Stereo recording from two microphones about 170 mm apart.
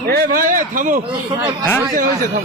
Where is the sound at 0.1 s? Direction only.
65° right (ahead or behind).